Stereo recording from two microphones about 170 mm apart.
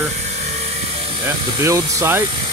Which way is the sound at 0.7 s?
35° right (ahead or behind).